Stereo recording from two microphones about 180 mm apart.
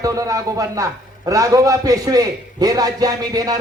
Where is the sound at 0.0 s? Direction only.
20° right (ahead or behind).